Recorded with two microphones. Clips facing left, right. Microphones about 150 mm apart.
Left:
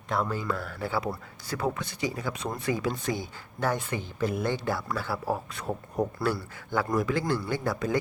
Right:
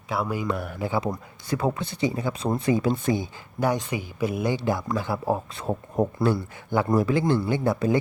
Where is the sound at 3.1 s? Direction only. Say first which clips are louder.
Right 6 dB; 20° right (ahead or behind).